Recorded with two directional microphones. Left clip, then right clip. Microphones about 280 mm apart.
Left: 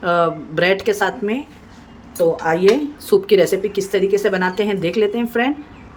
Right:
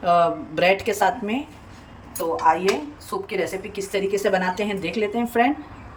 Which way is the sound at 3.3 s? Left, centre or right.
Left.